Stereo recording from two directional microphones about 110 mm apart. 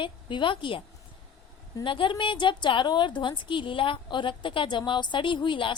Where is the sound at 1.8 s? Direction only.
50° left (ahead or behind).